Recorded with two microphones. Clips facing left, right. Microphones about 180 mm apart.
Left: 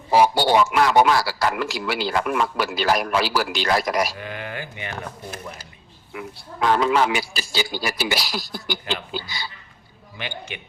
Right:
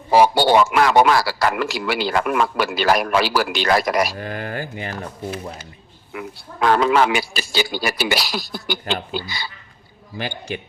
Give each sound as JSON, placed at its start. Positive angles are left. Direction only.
{"t": 0.1, "sound": "a man's voice", "side_deg": -70}
{"t": 4.2, "sound": "speech", "side_deg": -40}
{"t": 6.1, "sound": "a man's voice", "side_deg": -70}
{"t": 10.2, "sound": "speech", "side_deg": -40}